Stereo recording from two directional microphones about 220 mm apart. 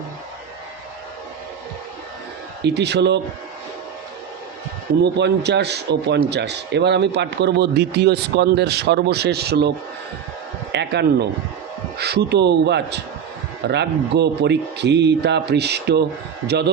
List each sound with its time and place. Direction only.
2.6 s a man's voice: 50° right (ahead or behind)
5.1 s a man's voice: 50° right (ahead or behind)